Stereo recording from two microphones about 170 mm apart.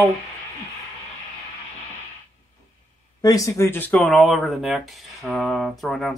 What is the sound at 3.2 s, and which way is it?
Speech, 20° left (ahead or behind).